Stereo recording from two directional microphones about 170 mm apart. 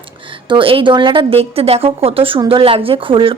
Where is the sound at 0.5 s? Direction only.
30° right (ahead or behind).